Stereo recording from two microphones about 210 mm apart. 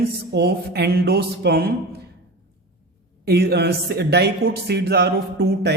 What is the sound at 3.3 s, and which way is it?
A man's voice, 50° right (ahead or behind).